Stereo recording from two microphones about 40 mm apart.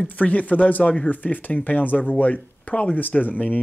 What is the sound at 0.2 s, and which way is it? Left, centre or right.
Speech, left.